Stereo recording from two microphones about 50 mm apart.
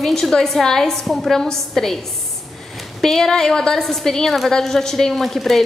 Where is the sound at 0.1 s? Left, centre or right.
Centre.